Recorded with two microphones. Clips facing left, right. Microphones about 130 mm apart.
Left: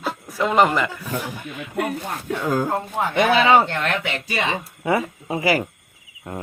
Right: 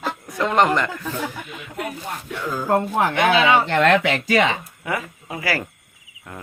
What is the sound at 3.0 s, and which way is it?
Speech, 70° right (ahead or behind).